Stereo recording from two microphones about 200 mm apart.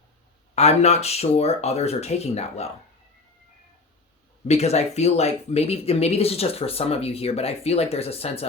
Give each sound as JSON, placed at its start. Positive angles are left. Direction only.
{"t": 0.5, "sound": "speech", "side_deg": 30}
{"t": 4.4, "sound": "speech", "side_deg": 30}